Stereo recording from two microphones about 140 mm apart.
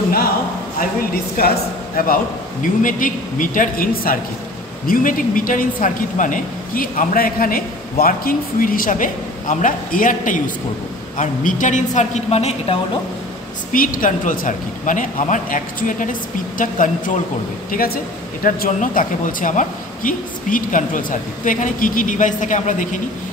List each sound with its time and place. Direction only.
1.4 s a woman's voice: 90° left
2.6 s a woman's voice: 70° left (ahead or behind); by 12.7 s 50° left (ahead or behind)
13.7 s speech: 75° left (ahead or behind)
17.6 s speech: 90° left; by 22.8 s 65° left (ahead or behind)